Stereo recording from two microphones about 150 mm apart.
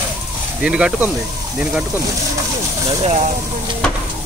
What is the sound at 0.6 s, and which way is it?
Speech, 5° right (ahead or behind).